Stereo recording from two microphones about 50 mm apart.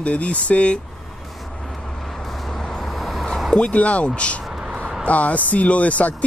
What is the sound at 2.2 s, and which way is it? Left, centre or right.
Vehicle, centre.